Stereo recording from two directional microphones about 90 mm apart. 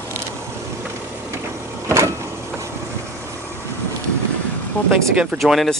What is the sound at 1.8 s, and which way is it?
Vehicle, 35° right (ahead or behind).